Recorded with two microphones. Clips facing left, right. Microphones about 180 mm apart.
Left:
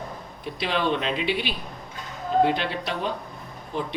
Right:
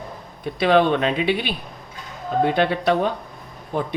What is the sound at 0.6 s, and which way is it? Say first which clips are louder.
Speech: right 8 dB; 55° right (ahead or behind).